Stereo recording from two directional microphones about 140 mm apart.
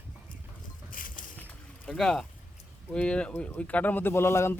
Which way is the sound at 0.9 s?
80° left.